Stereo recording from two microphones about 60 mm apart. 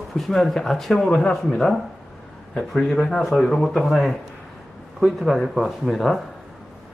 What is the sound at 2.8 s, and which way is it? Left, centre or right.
Speech, centre.